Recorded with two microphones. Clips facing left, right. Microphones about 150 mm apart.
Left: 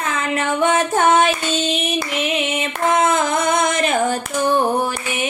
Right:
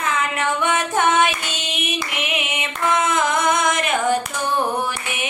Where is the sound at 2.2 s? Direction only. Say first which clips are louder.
Left 5 dB; 30° left (ahead or behind).